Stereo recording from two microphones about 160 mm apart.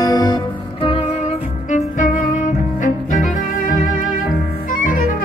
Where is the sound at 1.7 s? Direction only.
50° left (ahead or behind).